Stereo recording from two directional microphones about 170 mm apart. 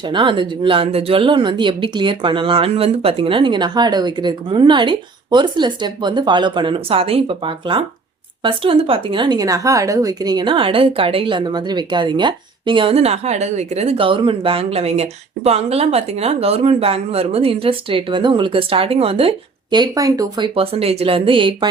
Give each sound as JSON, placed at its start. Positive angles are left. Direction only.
{"t": 0.0, "sound": "speech", "side_deg": -30}
{"t": 19.7, "sound": "speech", "side_deg": -20}